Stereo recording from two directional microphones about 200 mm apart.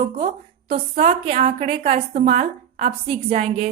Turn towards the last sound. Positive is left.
turn(degrees=-30)  # may be behind; listen again after turning